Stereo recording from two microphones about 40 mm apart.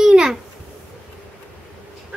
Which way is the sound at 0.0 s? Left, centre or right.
Centre.